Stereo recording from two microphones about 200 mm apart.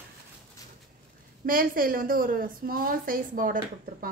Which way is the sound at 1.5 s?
45° right (ahead or behind).